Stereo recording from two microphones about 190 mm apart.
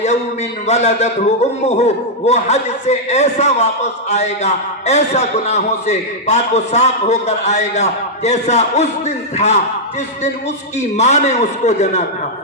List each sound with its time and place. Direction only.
0.7 s a man's voice: 35° left (ahead or behind)
10.8 s a man's voice: 35° left (ahead or behind)